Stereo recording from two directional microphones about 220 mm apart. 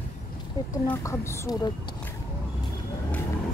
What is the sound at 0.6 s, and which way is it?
A woman's voice, 15° left (ahead or behind).